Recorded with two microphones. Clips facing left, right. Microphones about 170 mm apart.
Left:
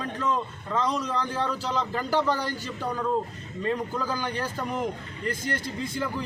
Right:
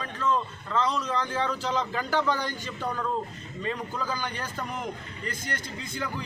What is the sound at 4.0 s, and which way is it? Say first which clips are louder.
Speech: left 3 dB; 10° left (ahead or behind).